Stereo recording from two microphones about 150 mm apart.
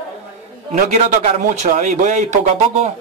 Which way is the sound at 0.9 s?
50° right (ahead or behind).